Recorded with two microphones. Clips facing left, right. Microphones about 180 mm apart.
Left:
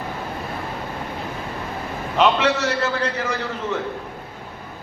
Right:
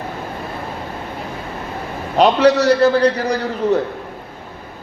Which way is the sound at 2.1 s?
35° right (ahead or behind).